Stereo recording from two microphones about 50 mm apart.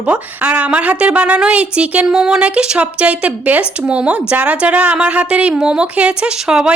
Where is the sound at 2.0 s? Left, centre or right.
Centre.